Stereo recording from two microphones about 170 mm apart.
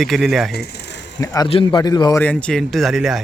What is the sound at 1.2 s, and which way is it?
A man's voice, 20° left (ahead or behind).